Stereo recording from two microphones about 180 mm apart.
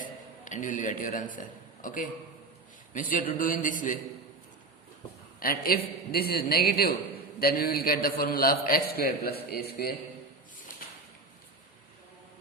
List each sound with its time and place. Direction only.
0.0 s a man's voice: 45° left (ahead or behind)
5.4 s a man's voice: 55° left (ahead or behind)